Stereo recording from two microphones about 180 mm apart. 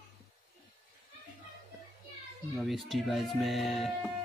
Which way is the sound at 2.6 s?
Centre (ahead or behind).